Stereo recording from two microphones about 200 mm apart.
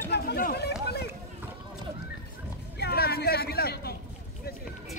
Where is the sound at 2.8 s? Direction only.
50° left (ahead or behind).